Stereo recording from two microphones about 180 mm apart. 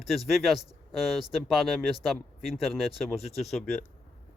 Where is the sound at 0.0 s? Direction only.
Centre (ahead or behind).